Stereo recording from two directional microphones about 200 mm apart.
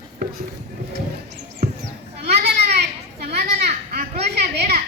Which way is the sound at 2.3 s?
55° right (ahead or behind).